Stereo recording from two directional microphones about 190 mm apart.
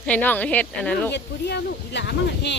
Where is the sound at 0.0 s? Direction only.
10° left (ahead or behind).